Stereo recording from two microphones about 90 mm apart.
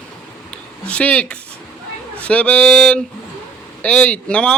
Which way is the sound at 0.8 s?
15° left (ahead or behind).